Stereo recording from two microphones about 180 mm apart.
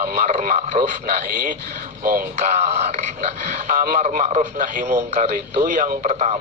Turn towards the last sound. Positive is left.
turn(degrees=-40)  # may be behind; listen again after turning